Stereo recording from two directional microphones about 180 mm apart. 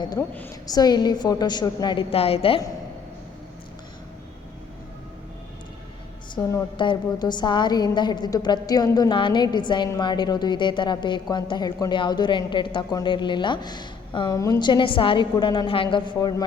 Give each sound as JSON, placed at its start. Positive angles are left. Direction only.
{"t": 0.2, "sound": "a woman's voice", "side_deg": 15}
{"t": 6.3, "sound": "a woman's voice", "side_deg": 20}